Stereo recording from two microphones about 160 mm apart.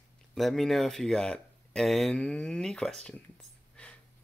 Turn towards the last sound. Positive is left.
turn(degrees=5)  # may be behind; listen again after turning